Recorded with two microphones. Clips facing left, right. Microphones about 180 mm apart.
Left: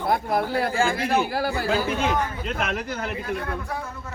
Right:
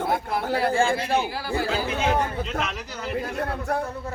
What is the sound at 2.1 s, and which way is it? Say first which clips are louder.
Speech: right 1 dB; 30° right (ahead or behind).